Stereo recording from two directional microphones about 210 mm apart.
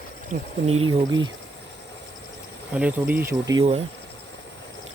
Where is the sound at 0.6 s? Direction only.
30° right (ahead or behind).